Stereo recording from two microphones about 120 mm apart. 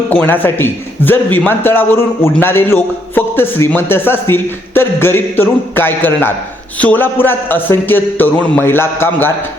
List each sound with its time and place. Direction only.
0.1 s a man's voice: 15° left (ahead or behind)